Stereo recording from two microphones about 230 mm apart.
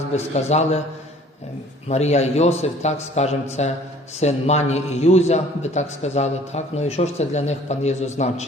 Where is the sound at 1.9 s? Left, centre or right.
Left.